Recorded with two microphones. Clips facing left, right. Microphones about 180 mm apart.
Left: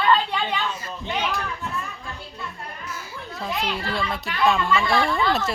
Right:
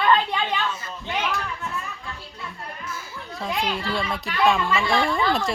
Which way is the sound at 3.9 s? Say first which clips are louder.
Right 1 dB; centre (ahead or behind).